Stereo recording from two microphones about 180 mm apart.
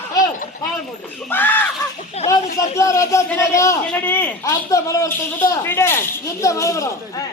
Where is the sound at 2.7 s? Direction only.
15° left (ahead or behind).